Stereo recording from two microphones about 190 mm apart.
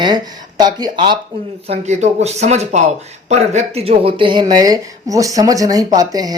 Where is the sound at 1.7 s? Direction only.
35° right (ahead or behind).